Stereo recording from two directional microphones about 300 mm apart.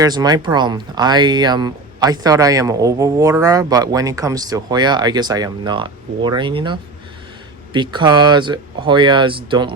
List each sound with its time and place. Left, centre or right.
0.0 s speech: centre